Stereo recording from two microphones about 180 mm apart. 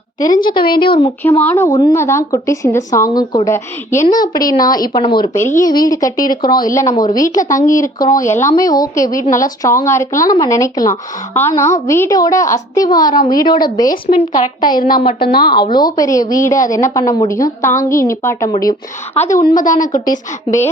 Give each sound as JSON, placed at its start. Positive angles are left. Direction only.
{"t": 0.4, "sound": "speech", "side_deg": 25}
{"t": 1.2, "sound": "a woman's voice", "side_deg": 10}
{"t": 4.0, "sound": "speech", "side_deg": 50}
{"t": 4.4, "sound": "speech", "side_deg": 20}
{"t": 6.2, "sound": "speech", "side_deg": 50}
{"t": 6.6, "sound": "a woman's voice", "side_deg": 20}
{"t": 19.1, "sound": "a woman's voice", "side_deg": 35}
{"t": 19.9, "sound": "speech", "side_deg": 20}